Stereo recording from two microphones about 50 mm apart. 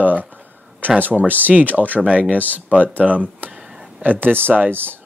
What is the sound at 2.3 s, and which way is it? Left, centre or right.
Speech, left.